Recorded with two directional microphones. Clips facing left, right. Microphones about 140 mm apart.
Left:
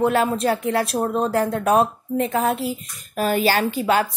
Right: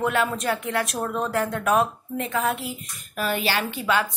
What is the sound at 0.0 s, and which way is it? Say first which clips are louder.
Speech: left 5 dB; 35° left (ahead or behind).